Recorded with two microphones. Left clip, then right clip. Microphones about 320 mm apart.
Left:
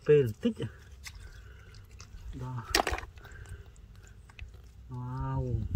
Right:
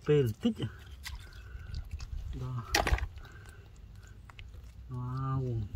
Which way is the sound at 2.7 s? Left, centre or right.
Centre.